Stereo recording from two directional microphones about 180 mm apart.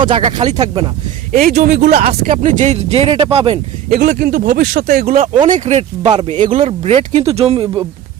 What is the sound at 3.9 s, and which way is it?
Speech, 65° right (ahead or behind).